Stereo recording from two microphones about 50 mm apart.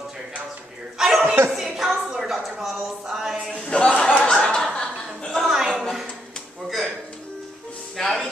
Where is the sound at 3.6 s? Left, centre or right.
Left.